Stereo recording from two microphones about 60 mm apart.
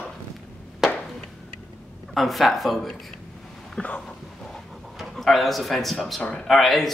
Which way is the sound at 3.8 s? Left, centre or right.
Centre.